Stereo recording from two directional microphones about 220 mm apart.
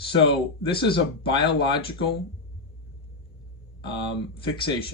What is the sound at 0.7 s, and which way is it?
Speech, 25° left (ahead or behind).